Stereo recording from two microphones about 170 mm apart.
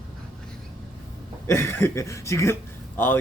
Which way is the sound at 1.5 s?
15° left (ahead or behind).